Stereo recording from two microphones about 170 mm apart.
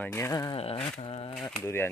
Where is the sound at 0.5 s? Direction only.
35° left (ahead or behind).